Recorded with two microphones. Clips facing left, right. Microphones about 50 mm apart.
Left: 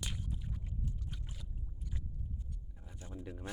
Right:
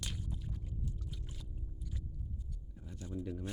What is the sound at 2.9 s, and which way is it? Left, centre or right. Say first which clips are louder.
Speech: right 5 dB; left.